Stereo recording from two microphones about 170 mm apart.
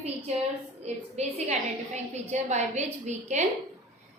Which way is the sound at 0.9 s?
40° right (ahead or behind).